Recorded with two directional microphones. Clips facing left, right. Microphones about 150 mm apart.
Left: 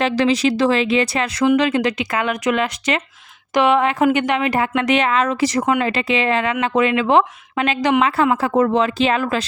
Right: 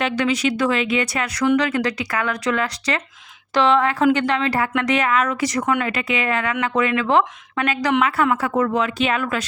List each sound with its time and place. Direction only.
0.0 s speech: 35° left (ahead or behind)